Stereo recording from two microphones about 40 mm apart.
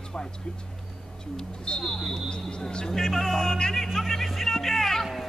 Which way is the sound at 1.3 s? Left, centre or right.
Left.